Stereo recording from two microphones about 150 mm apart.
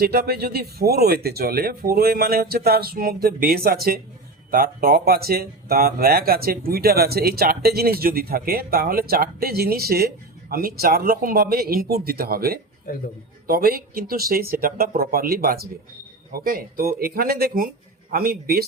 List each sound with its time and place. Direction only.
0.0 s speech: 90° right
4.5 s speech: 80° right